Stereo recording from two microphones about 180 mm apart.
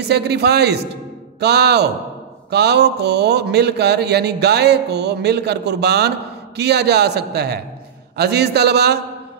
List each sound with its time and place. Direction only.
0.1 s a man's voice: 65° right (ahead or behind)